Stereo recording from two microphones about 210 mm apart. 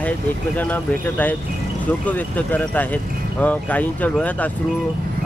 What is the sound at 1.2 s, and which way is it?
Speech, 10° left (ahead or behind).